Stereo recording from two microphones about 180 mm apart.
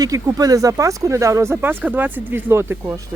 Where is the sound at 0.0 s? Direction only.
20° right (ahead or behind).